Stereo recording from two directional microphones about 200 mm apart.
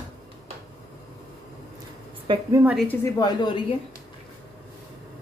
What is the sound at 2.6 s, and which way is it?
Speech, 5° right (ahead or behind).